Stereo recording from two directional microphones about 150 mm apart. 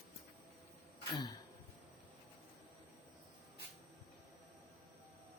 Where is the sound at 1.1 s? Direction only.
30° left (ahead or behind).